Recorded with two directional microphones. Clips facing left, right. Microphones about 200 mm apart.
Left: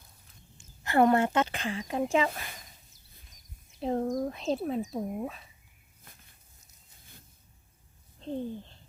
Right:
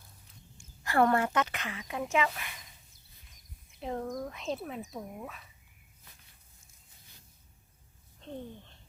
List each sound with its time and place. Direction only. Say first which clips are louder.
0.5 s speech: left 3 dB; 20° left (ahead or behind); by 2.6 s 40° left (ahead or behind)
3.8 s speech: left 6 dB; 35° left (ahead or behind)
8.2 s speech: left 8 dB; 35° left (ahead or behind)